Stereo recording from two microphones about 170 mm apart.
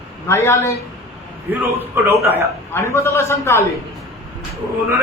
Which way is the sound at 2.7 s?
15° left (ahead or behind).